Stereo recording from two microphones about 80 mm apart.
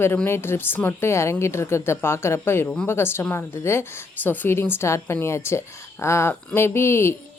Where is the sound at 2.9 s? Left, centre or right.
Left.